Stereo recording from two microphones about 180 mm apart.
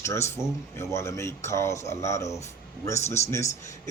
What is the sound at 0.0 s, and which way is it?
A man's voice, 15° left (ahead or behind).